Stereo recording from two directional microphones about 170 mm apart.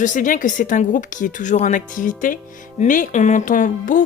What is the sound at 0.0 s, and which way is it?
Speech, 50° left (ahead or behind).